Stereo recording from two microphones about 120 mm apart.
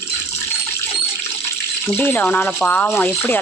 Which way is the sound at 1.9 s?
15° left (ahead or behind).